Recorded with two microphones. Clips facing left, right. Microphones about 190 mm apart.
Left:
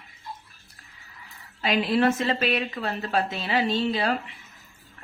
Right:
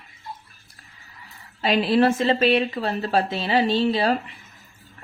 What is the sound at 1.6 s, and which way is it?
Speech, 30° right (ahead or behind).